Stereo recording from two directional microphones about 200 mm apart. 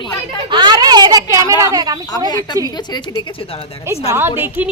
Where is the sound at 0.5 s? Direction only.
20° right (ahead or behind).